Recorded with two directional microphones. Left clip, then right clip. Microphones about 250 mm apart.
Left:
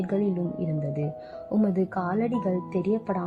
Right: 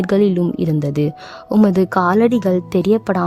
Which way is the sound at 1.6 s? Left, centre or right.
Right.